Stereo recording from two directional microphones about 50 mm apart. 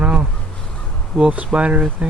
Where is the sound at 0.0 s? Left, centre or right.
Right.